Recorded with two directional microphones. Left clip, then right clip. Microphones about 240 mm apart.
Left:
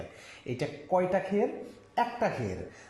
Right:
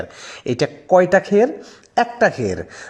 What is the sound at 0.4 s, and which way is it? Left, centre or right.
Speech, right.